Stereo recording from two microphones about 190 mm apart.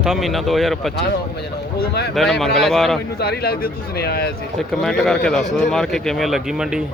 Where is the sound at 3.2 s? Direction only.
55° left (ahead or behind).